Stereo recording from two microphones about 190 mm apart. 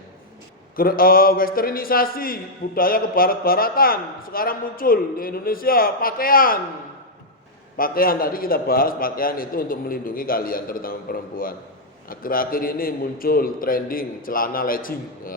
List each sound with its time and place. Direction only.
0.8 s a man's voice: 50° left (ahead or behind)
7.8 s a man's voice: 50° left (ahead or behind)